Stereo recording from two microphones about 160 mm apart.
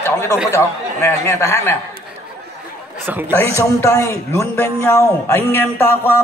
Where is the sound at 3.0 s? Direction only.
15° right (ahead or behind).